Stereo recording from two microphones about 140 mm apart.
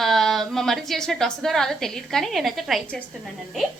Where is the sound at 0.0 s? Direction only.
Centre (ahead or behind).